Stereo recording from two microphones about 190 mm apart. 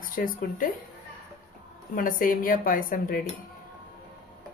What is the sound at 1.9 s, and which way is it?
Speech, 45° left (ahead or behind).